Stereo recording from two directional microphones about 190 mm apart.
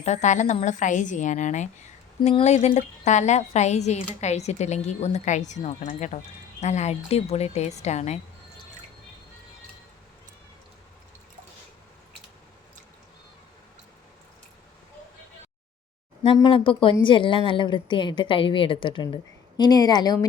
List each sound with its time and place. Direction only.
0.0 s speech: 40° left (ahead or behind)
16.2 s a woman's voice: 30° left (ahead or behind)